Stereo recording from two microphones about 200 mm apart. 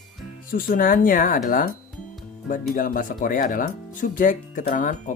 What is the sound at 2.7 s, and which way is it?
Speech, 45° left (ahead or behind).